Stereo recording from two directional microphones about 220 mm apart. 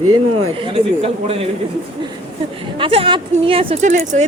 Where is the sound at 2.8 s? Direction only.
25° right (ahead or behind).